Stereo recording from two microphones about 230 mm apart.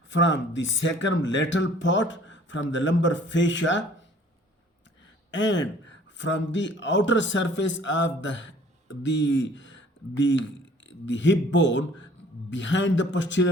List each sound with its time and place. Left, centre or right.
0.1 s speech: left
5.3 s speech: left